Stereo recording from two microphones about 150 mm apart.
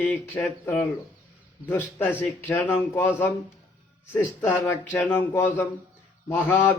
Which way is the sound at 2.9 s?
10° left (ahead or behind).